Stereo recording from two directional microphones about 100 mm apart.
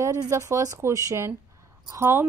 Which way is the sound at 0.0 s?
35° right (ahead or behind).